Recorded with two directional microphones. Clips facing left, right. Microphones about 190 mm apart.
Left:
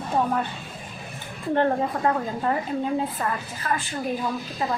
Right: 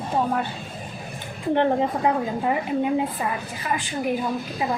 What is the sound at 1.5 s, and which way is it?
A woman's voice, 20° right (ahead or behind).